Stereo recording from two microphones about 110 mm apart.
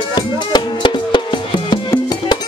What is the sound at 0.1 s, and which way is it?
Music, 45° left (ahead or behind).